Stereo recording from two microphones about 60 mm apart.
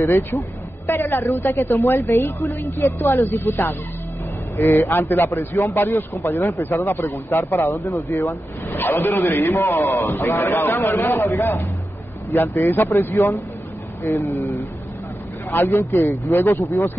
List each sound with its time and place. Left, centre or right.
0.0 s a man's voice: left
1.4 s speech: left
1.9 s a man's voice: left
3.4 s a man's voice: left
4.7 s a man's voice: left
13.2 s speech: left
14.0 s a man's voice: left
15.6 s speech: left